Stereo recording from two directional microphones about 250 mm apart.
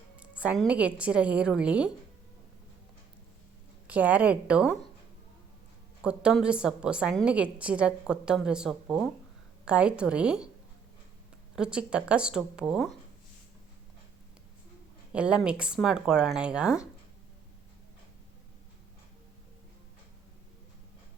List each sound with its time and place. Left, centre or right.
0.2 s a woman's voice: centre
3.8 s a woman's voice: centre
6.0 s a woman's voice: centre
11.5 s a woman's voice: centre
15.1 s a woman's voice: centre